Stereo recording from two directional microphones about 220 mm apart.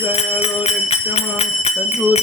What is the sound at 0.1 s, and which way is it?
Speech, 25° left (ahead or behind).